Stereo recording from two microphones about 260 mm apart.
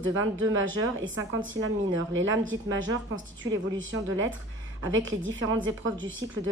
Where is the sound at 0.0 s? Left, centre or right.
Right.